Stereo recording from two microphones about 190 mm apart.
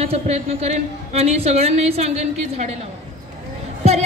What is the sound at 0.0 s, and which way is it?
A woman's voice, 30° right (ahead or behind).